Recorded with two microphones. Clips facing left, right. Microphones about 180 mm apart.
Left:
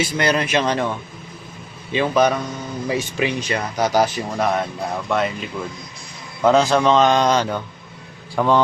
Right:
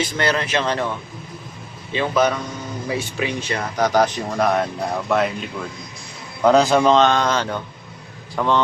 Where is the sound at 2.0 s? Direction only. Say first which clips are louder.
Left 2 dB; 15° left (ahead or behind).